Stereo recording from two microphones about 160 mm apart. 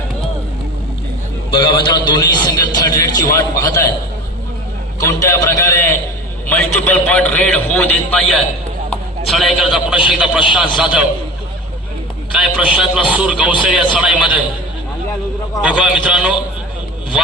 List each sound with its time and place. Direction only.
1.5 s a man's voice: 30° left (ahead or behind)
4.9 s a man's voice: 20° left (ahead or behind); by 11.0 s 5° right (ahead or behind)
12.3 s speech: 5° right (ahead or behind)
15.6 s a man's voice: 5° right (ahead or behind)